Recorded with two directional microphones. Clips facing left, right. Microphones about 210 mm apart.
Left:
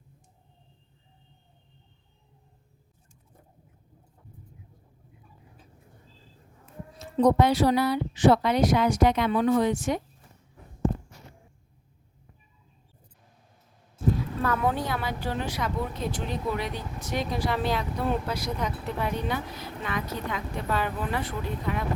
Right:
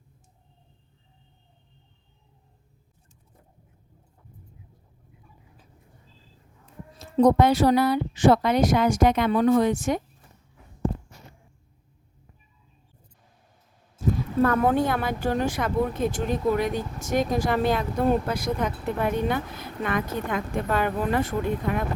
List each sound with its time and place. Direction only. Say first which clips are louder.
7.0 s speech: right 3 dB; 45° right (ahead or behind)
14.4 s speech: right 6 dB; 50° right (ahead or behind)